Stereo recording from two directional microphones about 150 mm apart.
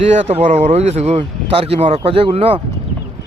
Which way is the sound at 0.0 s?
45° right (ahead or behind).